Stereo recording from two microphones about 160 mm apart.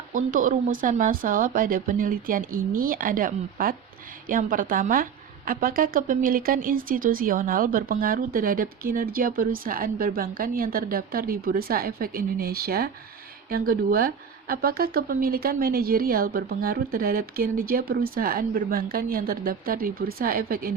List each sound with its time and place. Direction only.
0.1 s speech: 55° right (ahead or behind)